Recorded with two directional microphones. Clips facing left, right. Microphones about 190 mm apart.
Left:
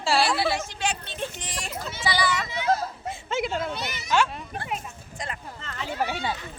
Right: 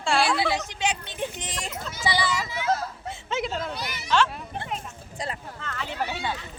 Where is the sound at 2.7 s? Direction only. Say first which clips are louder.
Left 2 dB; 10° left (ahead or behind).